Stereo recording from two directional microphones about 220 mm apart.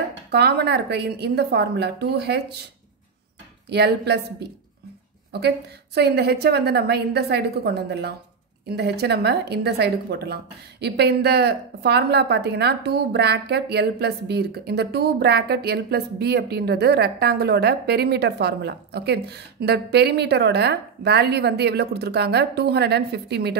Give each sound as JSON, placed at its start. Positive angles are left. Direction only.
{"t": 0.3, "sound": "a woman's voice", "side_deg": -50}
{"t": 3.6, "sound": "a woman's voice", "side_deg": -50}